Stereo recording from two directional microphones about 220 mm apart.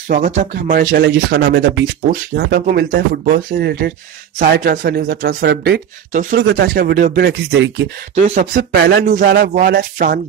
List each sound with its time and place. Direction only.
0.1 s speech: 35° right (ahead or behind); by 7.9 s 55° right (ahead or behind)
8.1 s speech: 35° right (ahead or behind)